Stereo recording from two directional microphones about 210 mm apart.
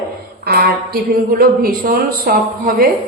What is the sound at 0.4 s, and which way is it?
A woman's voice, 45° right (ahead or behind).